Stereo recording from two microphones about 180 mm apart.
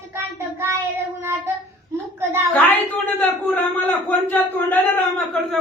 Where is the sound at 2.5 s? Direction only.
10° left (ahead or behind).